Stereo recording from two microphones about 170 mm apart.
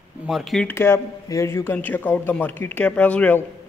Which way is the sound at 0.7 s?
15° left (ahead or behind).